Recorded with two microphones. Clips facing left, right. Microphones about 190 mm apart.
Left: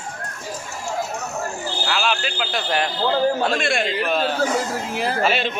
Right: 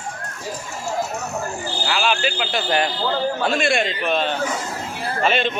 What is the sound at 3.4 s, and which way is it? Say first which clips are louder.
Speech: right 1 dB; centre (ahead or behind).